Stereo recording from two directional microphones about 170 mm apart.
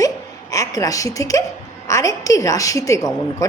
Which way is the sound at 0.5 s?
20° left (ahead or behind).